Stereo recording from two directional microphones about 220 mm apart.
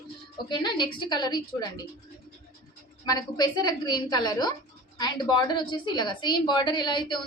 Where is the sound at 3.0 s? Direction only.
20° left (ahead or behind).